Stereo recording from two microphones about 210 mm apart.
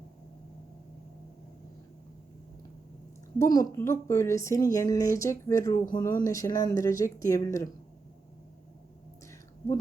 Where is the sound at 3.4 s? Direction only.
15° left (ahead or behind).